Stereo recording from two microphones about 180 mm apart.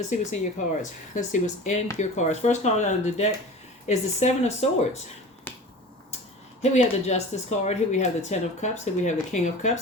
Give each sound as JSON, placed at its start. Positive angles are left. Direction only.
{"t": 0.1, "sound": "speech", "side_deg": 40}
{"t": 5.5, "sound": "finger snapping", "side_deg": 10}
{"t": 6.6, "sound": "speech", "side_deg": 40}